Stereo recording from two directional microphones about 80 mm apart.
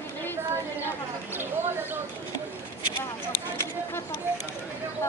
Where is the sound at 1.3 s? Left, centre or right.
Right.